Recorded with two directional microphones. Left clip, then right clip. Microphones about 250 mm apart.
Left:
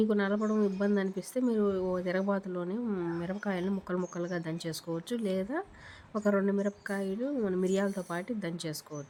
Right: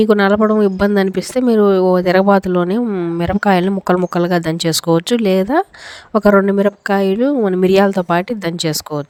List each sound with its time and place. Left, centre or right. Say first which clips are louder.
0.0 s speech: right 18 dB; right